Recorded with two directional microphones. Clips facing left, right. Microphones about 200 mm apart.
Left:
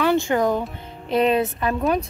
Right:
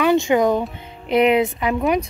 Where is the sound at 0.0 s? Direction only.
15° right (ahead or behind).